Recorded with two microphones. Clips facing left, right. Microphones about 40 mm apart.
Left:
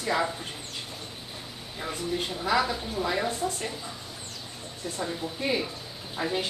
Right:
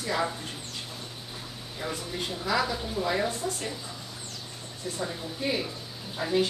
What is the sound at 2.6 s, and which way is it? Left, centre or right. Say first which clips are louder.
Speech: even; centre.